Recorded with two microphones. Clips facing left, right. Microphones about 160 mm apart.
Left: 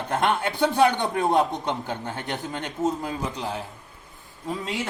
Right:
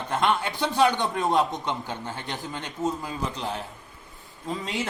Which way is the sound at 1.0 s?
10° left (ahead or behind).